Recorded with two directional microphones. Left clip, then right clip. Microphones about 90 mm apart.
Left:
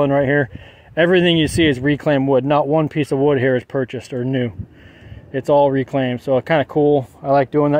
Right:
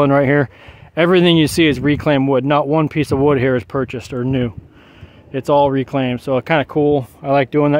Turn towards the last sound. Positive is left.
turn(degrees=-70)  # may be behind; listen again after turning